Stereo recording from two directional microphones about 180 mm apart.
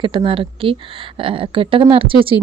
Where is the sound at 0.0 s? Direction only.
25° right (ahead or behind).